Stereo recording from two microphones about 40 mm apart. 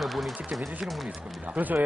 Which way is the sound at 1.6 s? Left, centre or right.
Right.